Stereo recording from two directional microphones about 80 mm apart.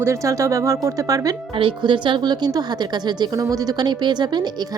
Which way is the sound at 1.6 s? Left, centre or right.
Right.